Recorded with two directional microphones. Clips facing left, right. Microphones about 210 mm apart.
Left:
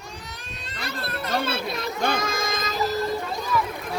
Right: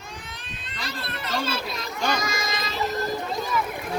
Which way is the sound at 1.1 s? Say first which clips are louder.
Left 2 dB; 60° left (ahead or behind).